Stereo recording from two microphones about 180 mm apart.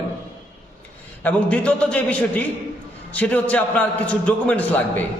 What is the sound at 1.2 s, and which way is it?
A man's voice, 5° left (ahead or behind).